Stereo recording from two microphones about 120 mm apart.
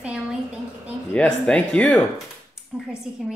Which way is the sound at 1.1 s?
10° left (ahead or behind).